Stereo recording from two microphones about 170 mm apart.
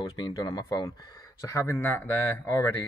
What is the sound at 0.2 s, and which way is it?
Speech, 25° left (ahead or behind).